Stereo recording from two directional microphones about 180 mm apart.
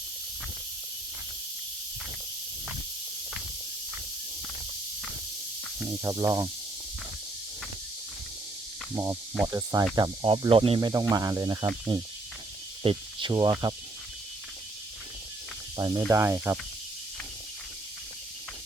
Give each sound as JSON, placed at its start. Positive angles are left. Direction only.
{"t": 6.0, "sound": "speech", "side_deg": -15}
{"t": 9.5, "sound": "speech", "side_deg": -20}
{"t": 10.8, "sound": "speech", "side_deg": -20}
{"t": 12.8, "sound": "speech", "side_deg": -30}
{"t": 15.8, "sound": "speech", "side_deg": -20}